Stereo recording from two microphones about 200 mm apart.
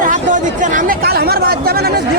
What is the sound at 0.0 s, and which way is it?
Chatter, 40° right (ahead or behind).